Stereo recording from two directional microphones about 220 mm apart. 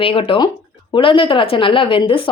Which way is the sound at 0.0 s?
25° left (ahead or behind).